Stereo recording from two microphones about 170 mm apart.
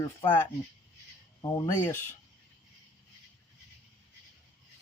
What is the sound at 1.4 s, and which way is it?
Speech, 25° left (ahead or behind).